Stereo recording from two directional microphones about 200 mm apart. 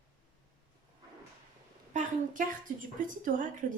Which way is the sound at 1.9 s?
40° right (ahead or behind).